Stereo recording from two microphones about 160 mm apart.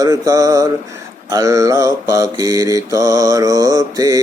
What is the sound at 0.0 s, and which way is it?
Mantra, 20° right (ahead or behind).